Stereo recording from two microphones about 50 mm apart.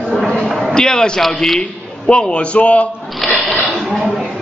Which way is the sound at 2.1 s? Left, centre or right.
Left.